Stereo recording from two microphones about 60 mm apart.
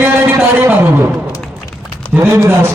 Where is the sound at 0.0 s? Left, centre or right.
Right.